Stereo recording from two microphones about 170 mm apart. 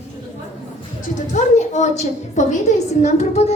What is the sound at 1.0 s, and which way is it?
A woman's voice, 45° left (ahead or behind).